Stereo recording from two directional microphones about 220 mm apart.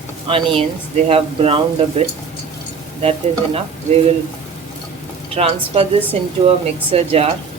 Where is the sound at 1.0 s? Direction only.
25° right (ahead or behind).